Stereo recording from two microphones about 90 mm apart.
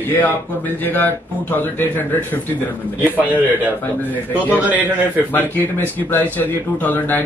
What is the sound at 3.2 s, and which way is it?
Speech, 15° right (ahead or behind).